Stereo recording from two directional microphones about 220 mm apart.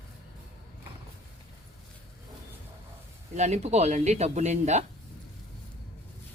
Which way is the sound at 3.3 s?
30° right (ahead or behind).